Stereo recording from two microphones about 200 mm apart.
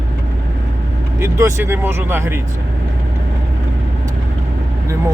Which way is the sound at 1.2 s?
15° right (ahead or behind).